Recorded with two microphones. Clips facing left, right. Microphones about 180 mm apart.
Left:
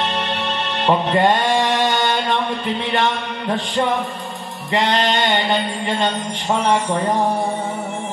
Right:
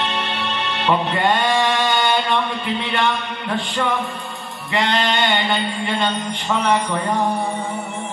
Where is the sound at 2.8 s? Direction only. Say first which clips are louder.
Left 2 dB; 25° left (ahead or behind).